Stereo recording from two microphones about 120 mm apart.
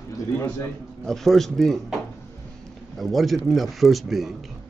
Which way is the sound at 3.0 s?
Centre (ahead or behind).